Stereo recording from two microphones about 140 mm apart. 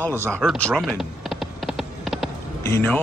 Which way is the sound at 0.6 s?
5° left (ahead or behind).